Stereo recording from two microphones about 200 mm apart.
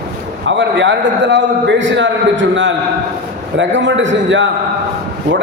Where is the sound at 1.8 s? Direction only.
65° right (ahead or behind).